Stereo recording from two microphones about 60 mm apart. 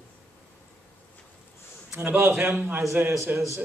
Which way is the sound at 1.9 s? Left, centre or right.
Right.